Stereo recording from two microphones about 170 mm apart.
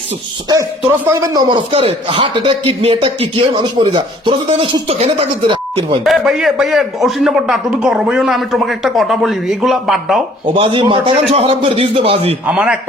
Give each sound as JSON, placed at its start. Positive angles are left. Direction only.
{"t": 0.8, "sound": "a man's voice", "side_deg": -10}
{"t": 6.1, "sound": "a man's voice", "side_deg": 0}
{"t": 10.5, "sound": "a man's voice", "side_deg": -30}
{"t": 12.5, "sound": "a man's voice", "side_deg": -5}